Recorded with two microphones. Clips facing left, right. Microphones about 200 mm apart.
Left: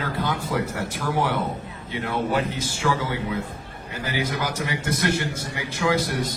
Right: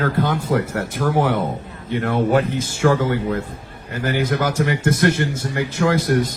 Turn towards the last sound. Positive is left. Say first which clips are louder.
# right 5 dB
turn(degrees=-50)  # may be behind; listen again after turning